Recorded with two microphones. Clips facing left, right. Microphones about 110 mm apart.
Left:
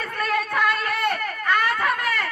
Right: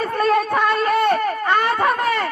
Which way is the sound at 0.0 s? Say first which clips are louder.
Right 7 dB; 30° right (ahead or behind).